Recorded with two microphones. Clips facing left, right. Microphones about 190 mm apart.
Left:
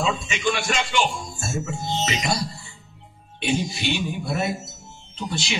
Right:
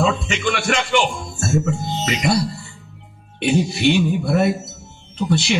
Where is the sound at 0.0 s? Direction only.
60° right (ahead or behind).